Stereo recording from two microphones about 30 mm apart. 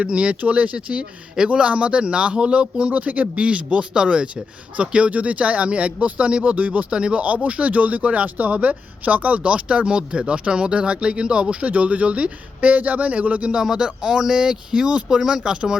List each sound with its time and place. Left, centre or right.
0.0 s speech: right
3.4 s speech: right
6.9 s speech: right
7.2 s speech: right
9.4 s speech: right
11.6 s speech: right
12.7 s speech: right
13.6 s speech: right